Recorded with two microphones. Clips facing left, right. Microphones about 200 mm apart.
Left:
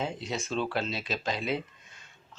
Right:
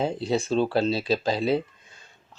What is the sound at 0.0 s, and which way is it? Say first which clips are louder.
Speech: right 8 dB; 30° right (ahead or behind).